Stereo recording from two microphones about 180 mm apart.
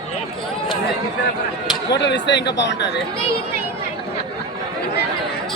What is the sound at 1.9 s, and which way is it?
Speech, 75° left (ahead or behind).